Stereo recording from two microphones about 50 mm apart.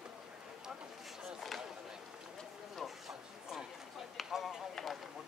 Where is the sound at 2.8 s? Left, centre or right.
Centre.